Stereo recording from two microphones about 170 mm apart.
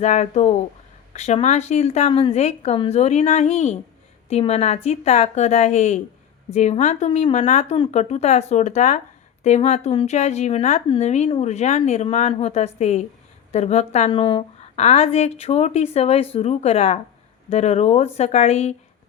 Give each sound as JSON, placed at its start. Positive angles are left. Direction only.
{"t": 0.0, "sound": "a woman's voice", "side_deg": 45}
{"t": 9.9, "sound": "speech", "side_deg": 30}
{"t": 10.2, "sound": "a woman's voice", "side_deg": 45}